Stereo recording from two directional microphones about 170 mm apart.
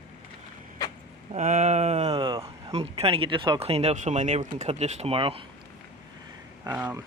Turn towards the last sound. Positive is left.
turn(degrees=-15)  # may be behind; listen again after turning